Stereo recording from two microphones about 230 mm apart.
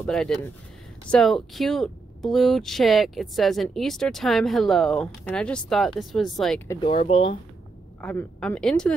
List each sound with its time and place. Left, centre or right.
0.0 s speech: centre
6.8 s speech: left
8.0 s speech: centre